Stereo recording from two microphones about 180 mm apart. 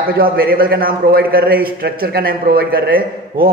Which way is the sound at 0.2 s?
55° right (ahead or behind).